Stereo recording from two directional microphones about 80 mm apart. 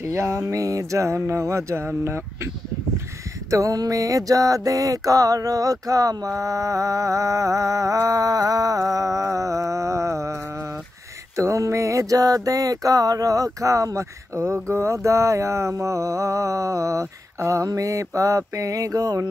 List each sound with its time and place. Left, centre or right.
0.0 s music: right
0.4 s music: right
3.4 s mantra: right